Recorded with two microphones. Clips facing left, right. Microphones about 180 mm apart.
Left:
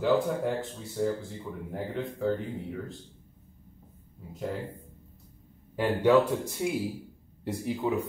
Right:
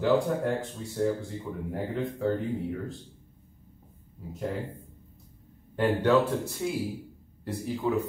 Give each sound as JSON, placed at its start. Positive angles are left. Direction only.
{"t": 0.0, "sound": "speech", "side_deg": 0}
{"t": 4.3, "sound": "speech", "side_deg": 0}
{"t": 5.8, "sound": "speech", "side_deg": 10}